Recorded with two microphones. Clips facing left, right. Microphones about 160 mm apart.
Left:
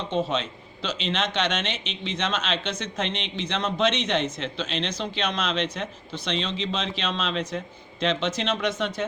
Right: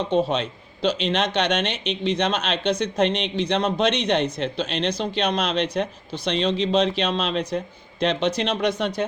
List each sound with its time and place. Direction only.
0.1 s a man's voice: 40° right (ahead or behind)